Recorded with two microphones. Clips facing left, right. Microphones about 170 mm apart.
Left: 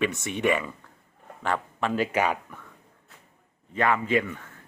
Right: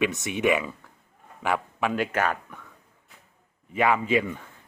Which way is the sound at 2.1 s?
10° left (ahead or behind).